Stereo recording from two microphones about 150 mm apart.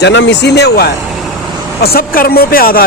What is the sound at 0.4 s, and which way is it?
Speech, 90° left.